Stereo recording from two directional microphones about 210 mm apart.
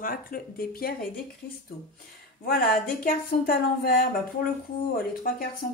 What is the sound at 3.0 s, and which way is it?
Speech, 45° left (ahead or behind).